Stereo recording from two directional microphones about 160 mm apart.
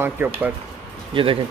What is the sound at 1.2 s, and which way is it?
Speech, 30° right (ahead or behind).